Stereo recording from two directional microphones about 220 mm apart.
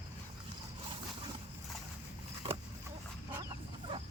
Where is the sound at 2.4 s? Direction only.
20° right (ahead or behind).